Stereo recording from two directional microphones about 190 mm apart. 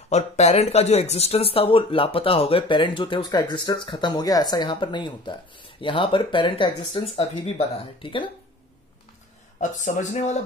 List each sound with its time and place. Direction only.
0.1 s speech: 35° left (ahead or behind)
9.6 s speech: 40° left (ahead or behind)